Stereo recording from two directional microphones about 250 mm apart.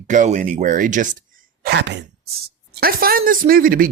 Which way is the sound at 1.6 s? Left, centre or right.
Right.